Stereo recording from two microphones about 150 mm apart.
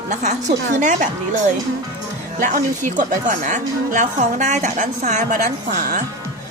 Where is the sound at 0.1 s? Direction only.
50° right (ahead or behind).